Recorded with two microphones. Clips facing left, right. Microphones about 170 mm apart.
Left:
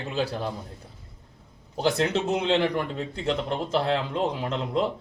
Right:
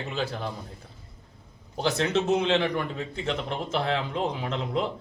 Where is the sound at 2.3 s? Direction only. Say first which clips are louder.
Left 1 dB; centre (ahead or behind).